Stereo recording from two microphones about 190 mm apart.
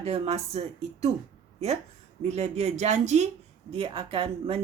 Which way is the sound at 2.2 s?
35° right (ahead or behind).